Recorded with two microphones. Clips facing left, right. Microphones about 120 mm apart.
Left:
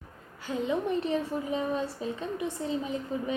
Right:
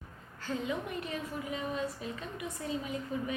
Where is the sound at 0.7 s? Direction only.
30° left (ahead or behind).